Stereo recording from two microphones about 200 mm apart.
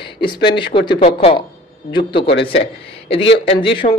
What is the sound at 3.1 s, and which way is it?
Speech, 30° left (ahead or behind).